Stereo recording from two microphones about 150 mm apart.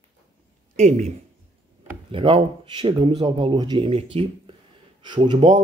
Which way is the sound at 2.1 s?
35° right (ahead or behind).